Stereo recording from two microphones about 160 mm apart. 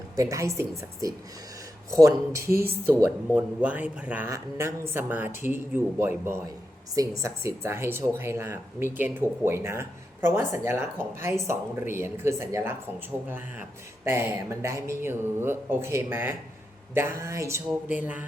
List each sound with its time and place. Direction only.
0.2 s a woman's voice: 20° right (ahead or behind)
1.9 s a woman's voice: 20° right (ahead or behind)
14.0 s speech: 15° right (ahead or behind)